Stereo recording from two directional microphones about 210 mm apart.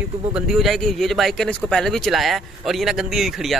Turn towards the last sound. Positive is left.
turn(degrees=0)  # may be behind; listen again after turning